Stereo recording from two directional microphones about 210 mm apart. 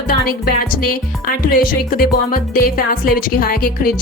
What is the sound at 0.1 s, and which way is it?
Speech, 45° left (ahead or behind).